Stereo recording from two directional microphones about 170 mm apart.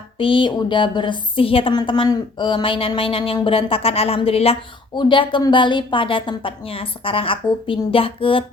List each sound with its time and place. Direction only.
0.2 s a woman's voice: 30° left (ahead or behind)